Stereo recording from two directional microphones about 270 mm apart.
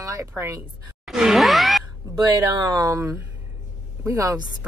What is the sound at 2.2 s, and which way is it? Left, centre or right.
A woman's voice, centre.